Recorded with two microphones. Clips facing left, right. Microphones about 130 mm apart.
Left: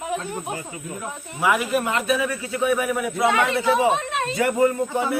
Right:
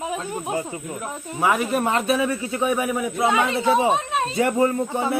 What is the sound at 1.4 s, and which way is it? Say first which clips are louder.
Speech: even; 35° right (ahead or behind).